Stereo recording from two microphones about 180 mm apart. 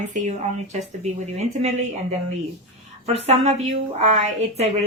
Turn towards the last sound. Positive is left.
turn(degrees=-40)  # may be behind; listen again after turning